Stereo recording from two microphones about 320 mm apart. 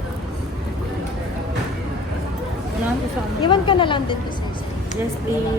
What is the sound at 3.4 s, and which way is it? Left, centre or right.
Speech, centre.